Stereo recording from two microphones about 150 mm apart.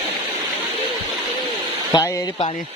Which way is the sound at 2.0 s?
20° left (ahead or behind).